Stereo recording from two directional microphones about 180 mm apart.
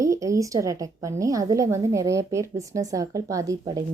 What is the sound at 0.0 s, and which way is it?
A woman's voice, 15° right (ahead or behind).